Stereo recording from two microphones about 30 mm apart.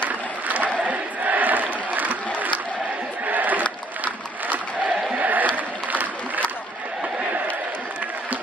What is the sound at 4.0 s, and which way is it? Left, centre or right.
Crowd, right.